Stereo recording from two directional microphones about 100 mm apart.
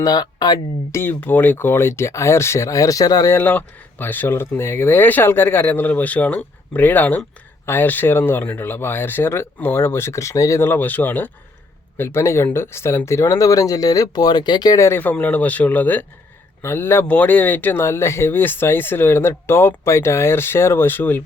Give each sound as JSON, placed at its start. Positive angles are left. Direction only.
{"t": 0.0, "sound": "speech", "side_deg": 40}
{"t": 0.9, "sound": "speech", "side_deg": 25}
{"t": 3.3, "sound": "speech", "side_deg": 20}
{"t": 10.7, "sound": "speech", "side_deg": 20}
{"t": 14.8, "sound": "speech", "side_deg": 25}